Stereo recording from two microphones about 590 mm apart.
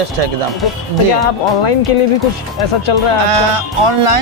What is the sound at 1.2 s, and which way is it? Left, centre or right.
Speech, left.